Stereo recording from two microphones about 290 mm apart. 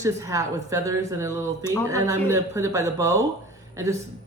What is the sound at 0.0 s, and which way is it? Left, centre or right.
A woman's voice, centre.